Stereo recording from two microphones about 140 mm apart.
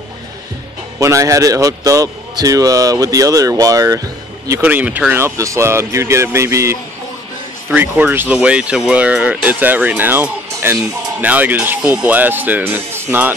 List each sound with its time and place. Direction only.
0.9 s speech: 20° right (ahead or behind)